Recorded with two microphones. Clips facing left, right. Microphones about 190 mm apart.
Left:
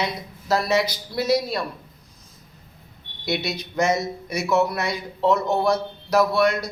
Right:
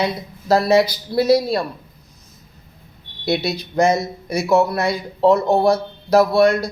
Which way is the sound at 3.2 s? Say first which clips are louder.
Right 5 dB; 30° right (ahead or behind).